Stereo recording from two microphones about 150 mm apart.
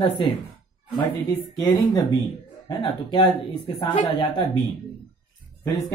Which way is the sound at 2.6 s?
30° left (ahead or behind).